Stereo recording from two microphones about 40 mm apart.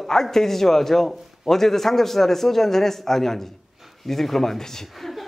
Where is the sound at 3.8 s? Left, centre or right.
Centre.